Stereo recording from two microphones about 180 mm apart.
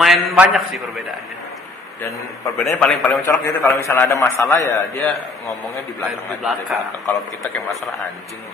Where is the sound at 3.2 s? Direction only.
15° left (ahead or behind).